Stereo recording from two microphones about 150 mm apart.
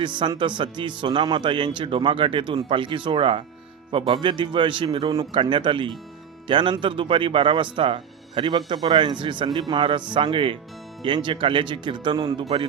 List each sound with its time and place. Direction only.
0.0 s speech: 30° right (ahead or behind)